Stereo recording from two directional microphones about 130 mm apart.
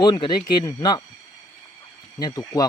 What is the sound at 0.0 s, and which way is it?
Speech, 35° left (ahead or behind).